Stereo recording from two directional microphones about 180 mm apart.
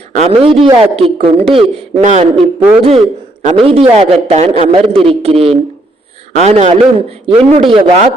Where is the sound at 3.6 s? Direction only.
35° right (ahead or behind).